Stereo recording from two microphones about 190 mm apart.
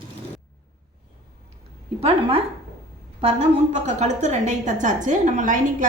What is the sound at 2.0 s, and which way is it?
A woman's voice, 30° right (ahead or behind).